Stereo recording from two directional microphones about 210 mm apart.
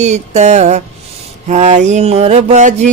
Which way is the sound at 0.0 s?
35° right (ahead or behind).